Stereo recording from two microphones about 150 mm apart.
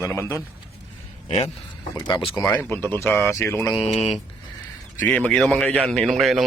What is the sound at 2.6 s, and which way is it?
Speech, 15° left (ahead or behind).